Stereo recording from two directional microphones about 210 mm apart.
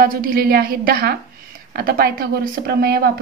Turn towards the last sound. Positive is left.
turn(degrees=-45)  # may be behind; listen again after turning